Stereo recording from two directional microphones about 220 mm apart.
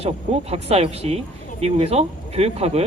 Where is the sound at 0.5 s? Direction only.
30° right (ahead or behind).